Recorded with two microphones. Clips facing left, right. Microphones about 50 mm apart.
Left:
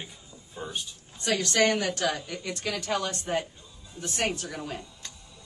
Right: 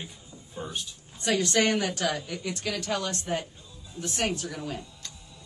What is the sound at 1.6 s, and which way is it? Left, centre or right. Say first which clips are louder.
A woman's voice: left 1 dB; centre.